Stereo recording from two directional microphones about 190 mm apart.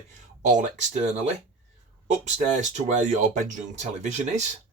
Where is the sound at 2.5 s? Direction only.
40° right (ahead or behind).